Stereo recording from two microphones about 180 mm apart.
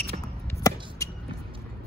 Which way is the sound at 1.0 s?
20° left (ahead or behind).